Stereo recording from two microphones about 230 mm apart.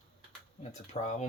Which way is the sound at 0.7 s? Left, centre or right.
Left.